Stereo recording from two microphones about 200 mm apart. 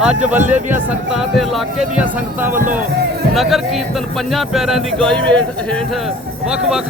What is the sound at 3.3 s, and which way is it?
Speech, centre (ahead or behind).